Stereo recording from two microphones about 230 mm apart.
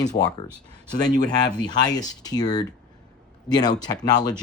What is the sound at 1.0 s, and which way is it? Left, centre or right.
Speech, centre.